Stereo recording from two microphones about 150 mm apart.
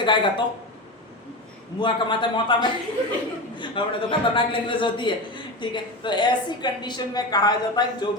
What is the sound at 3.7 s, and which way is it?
A woman's voice, 35° left (ahead or behind).